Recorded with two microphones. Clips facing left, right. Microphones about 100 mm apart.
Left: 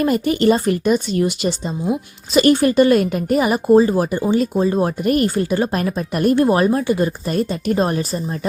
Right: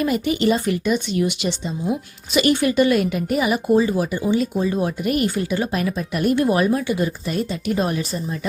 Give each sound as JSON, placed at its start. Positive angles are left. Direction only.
{"t": 0.0, "sound": "speech", "side_deg": 45}